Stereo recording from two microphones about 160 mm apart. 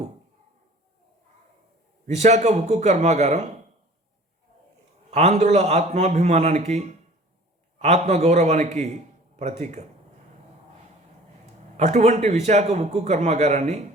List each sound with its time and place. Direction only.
2.0 s a man's voice: 45° right (ahead or behind)
5.1 s a man's voice: 45° right (ahead or behind)
11.8 s a man's voice: 45° right (ahead or behind)